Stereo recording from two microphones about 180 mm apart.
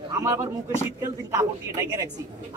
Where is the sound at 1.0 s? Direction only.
15° right (ahead or behind).